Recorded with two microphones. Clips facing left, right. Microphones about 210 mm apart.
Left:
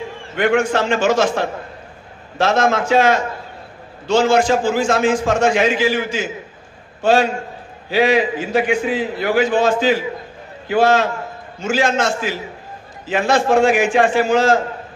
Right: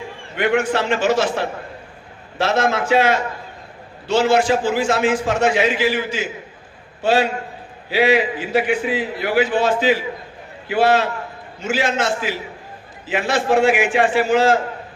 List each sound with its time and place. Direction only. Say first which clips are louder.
0.4 s a man's voice: left 2 dB; 45° left (ahead or behind)